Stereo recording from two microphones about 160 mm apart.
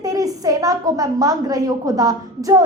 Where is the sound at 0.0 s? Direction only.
20° right (ahead or behind).